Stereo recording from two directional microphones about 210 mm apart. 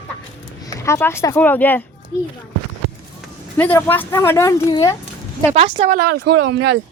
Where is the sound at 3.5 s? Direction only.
10° left (ahead or behind).